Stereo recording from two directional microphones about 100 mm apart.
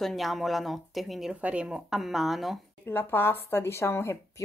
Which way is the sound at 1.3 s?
15° right (ahead or behind).